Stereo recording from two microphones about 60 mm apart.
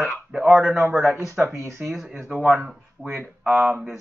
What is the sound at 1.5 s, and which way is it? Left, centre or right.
Speech, right.